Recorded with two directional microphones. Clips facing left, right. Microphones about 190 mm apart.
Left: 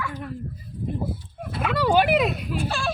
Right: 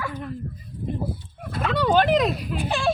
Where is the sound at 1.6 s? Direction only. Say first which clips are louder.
Even; 5° left (ahead or behind).